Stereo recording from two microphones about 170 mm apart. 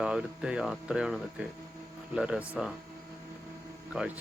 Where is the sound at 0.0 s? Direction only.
5° right (ahead or behind).